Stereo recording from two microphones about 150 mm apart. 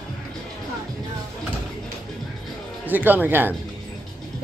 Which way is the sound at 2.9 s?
10° right (ahead or behind).